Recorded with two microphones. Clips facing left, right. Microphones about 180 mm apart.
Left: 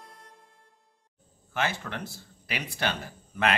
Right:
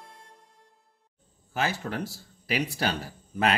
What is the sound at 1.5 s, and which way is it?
Speech, 40° right (ahead or behind).